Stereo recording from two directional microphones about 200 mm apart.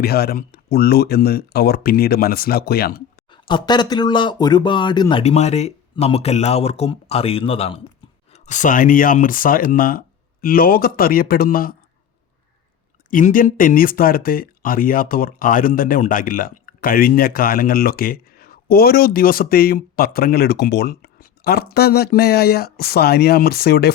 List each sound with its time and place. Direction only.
0.0 s speech: 50° left (ahead or behind)
3.4 s speech: 20° left (ahead or behind)
8.3 s speech: 40° left (ahead or behind)
13.1 s speech: 40° left (ahead or behind)